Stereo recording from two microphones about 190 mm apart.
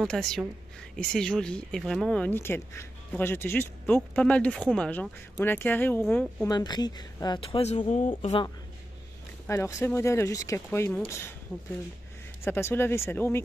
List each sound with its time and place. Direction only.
0.0 s a woman's voice: centre (ahead or behind)
6.5 s speech: 20° left (ahead or behind)
9.5 s speech: 15° left (ahead or behind)
12.4 s speech: 10° left (ahead or behind)